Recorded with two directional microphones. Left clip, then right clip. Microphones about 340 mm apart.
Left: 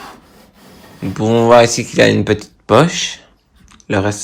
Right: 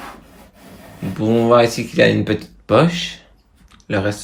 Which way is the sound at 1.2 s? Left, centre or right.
Centre.